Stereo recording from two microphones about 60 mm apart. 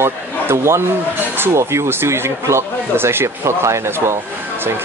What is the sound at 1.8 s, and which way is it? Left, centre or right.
Speech, right.